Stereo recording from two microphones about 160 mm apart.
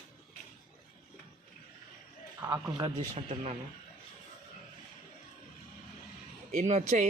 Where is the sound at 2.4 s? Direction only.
25° right (ahead or behind).